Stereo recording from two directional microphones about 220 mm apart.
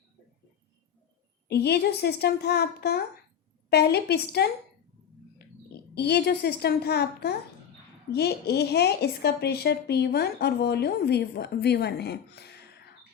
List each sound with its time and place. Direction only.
1.5 s a woman's voice: 50° left (ahead or behind)
5.9 s a woman's voice: 50° left (ahead or behind)